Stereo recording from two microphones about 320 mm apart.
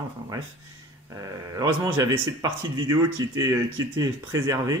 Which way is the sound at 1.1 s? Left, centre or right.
Centre.